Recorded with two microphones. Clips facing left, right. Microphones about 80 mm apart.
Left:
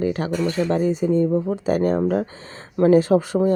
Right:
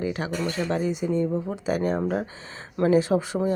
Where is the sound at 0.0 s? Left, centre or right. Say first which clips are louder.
Left 5 dB; left.